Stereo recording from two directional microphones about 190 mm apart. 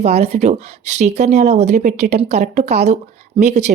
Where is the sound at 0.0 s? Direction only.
35° right (ahead or behind).